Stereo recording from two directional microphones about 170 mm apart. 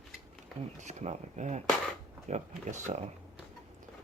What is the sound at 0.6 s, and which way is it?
Speech, 45° right (ahead or behind).